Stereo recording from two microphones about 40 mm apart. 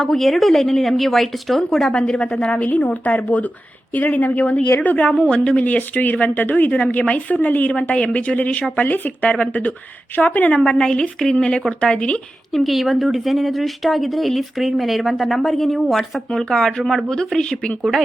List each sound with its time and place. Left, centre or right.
0.0 s speech: centre
1.9 s a woman's voice: left
2.6 s speech: left
5.1 s a woman's voice: centre
5.4 s speech: left
6.7 s speech: left
9.3 s speech: left
10.6 s a woman's voice: centre
12.5 s speech: centre
16.3 s speech: centre
17.5 s a woman's voice: left